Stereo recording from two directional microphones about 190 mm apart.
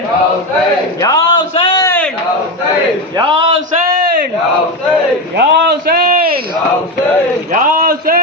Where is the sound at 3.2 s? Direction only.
25° right (ahead or behind).